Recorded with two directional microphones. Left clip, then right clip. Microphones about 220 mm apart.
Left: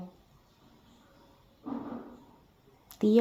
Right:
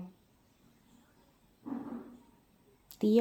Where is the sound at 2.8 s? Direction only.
5° left (ahead or behind).